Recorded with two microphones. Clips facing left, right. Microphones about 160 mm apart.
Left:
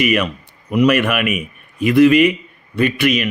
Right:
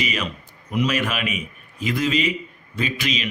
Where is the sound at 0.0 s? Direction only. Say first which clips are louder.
Left 10 dB; 60° left (ahead or behind).